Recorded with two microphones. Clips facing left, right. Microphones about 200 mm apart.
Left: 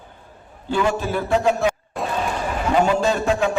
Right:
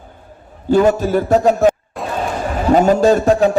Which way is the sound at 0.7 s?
40° right (ahead or behind).